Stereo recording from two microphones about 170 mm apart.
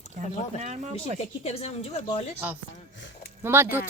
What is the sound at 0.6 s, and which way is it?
Speech, 45° right (ahead or behind).